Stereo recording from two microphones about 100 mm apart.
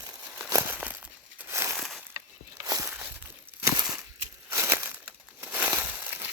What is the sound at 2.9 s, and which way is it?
Walk, 20° right (ahead or behind).